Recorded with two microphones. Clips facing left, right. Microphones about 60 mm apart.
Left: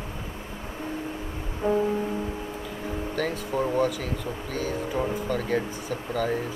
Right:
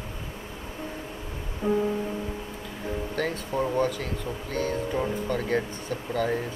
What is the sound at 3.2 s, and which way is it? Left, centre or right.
Speech, centre.